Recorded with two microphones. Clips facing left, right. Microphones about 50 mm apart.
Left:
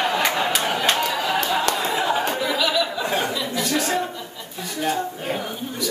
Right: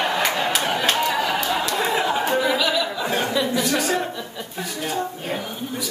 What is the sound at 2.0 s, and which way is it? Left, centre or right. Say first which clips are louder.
Chatter: even; centre.